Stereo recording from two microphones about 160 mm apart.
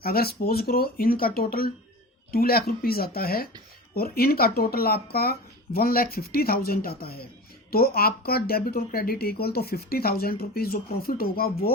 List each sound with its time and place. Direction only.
0.0 s speech: 70° left (ahead or behind)